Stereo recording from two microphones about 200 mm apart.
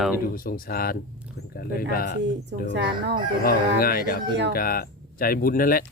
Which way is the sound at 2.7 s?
60° right (ahead or behind).